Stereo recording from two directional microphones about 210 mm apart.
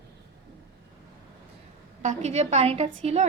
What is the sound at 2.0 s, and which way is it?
A woman's voice, 35° right (ahead or behind).